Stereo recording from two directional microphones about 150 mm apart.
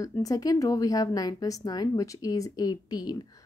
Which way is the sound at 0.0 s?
25° left (ahead or behind).